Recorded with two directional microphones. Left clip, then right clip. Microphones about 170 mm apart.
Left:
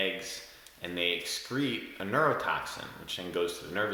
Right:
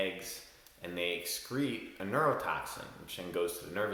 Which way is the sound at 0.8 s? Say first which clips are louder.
Left 5 dB; 20° left (ahead or behind).